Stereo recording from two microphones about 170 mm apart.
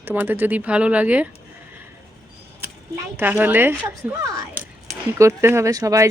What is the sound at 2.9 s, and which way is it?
Speech, 10° right (ahead or behind).